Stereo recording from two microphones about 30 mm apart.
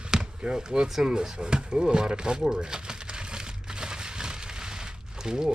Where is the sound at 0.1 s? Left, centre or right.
Right.